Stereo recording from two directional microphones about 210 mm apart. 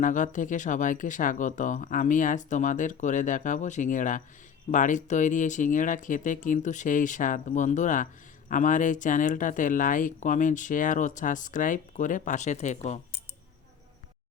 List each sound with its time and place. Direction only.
0.0 s speech: 35° left (ahead or behind)